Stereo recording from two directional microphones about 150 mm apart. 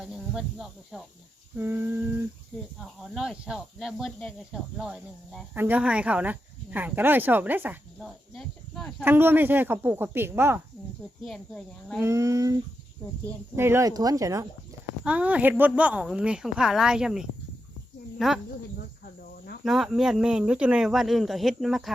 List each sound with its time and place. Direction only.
0.0 s speech: 5° right (ahead or behind)
1.5 s speech: 15° right (ahead or behind)
2.5 s speech: 5° right (ahead or behind)
8.0 s speech: centre (ahead or behind)
9.0 s speech: 15° right (ahead or behind)
11.3 s speech: 5° left (ahead or behind)
12.0 s speech: 20° right (ahead or behind)
13.6 s speech: 15° right (ahead or behind)
15.0 s speech: 10° right (ahead or behind)
19.6 s speech: centre (ahead or behind)